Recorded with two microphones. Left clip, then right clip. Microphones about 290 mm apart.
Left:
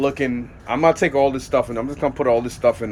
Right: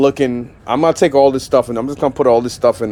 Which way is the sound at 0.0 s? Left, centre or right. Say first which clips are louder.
Right 7 dB; right.